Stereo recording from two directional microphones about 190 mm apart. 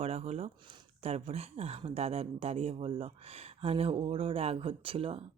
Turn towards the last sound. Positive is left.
turn(degrees=-30)  # may be behind; listen again after turning